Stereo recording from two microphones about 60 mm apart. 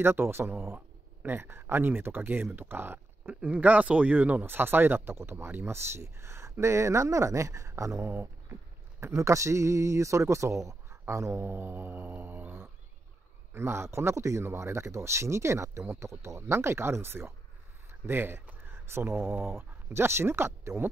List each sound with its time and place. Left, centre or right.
0.0 s speech: right
3.3 s speech: right
8.1 s speech: right
9.0 s speech: right
11.5 s speech: right